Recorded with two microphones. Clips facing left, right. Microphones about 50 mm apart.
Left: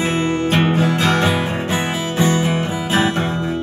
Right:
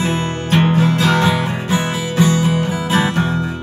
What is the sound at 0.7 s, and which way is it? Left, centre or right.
Music, left.